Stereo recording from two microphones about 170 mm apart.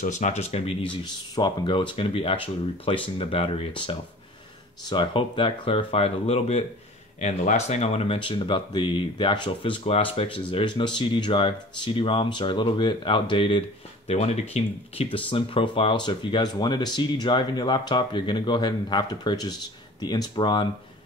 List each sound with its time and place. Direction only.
0.0 s speech: 45° left (ahead or behind)
1.0 s speech: 25° left (ahead or behind)